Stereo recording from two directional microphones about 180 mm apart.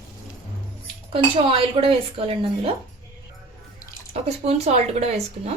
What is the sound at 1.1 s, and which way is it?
Speech, 30° right (ahead or behind).